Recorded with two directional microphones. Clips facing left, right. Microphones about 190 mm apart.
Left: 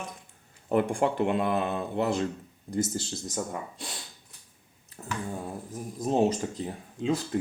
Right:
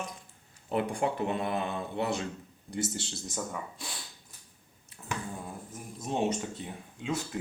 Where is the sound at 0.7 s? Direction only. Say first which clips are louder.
Left 5 dB; 50° left (ahead or behind).